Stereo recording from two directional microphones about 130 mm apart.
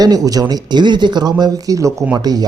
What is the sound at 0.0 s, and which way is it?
Speech, 30° right (ahead or behind).